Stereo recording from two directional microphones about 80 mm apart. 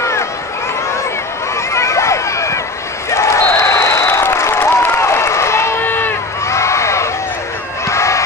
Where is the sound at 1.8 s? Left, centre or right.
Left.